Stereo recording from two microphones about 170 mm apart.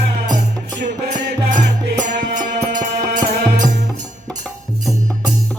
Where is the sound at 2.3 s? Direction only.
45° right (ahead or behind).